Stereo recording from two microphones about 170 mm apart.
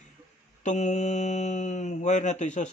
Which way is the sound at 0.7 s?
45° left (ahead or behind).